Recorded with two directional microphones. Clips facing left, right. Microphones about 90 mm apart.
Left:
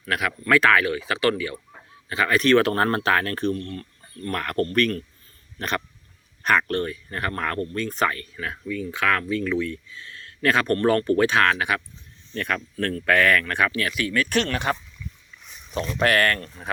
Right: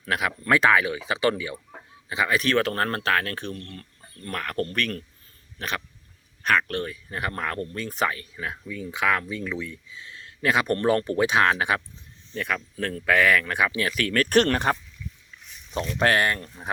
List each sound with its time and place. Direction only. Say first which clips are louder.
0.1 s speech: left 2 dB; 20° right (ahead or behind); by 2.6 s 5° right (ahead or behind)
2.6 s speech: left 4 dB; 5° left (ahead or behind)
3.5 s speech: left 8 dB; 30° left (ahead or behind)
4.3 s speech: left 3 dB; centre (ahead or behind)
5.5 s hiccup: left 4 dB; centre (ahead or behind)
6.4 s speech: left 2 dB; 5° left (ahead or behind); by 11.8 s 25° right (ahead or behind)
12.3 s speech: left 1 dB; 5° right (ahead or behind)
13.9 s speech: right 3 dB; 45° right (ahead or behind)
16.0 s speech: left 1 dB; 30° right (ahead or behind)
16.2 s speech: left 2 dB; 15° right (ahead or behind)